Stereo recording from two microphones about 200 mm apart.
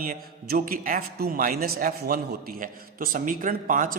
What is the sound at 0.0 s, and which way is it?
A man's voice, 45° right (ahead or behind).